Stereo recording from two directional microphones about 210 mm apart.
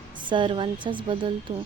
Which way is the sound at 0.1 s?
20° right (ahead or behind).